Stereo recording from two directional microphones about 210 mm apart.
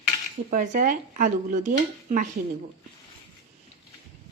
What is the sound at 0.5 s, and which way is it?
Speech, 40° right (ahead or behind).